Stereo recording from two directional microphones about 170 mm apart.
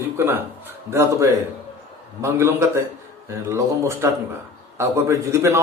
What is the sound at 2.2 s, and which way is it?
A man's voice, 15° right (ahead or behind).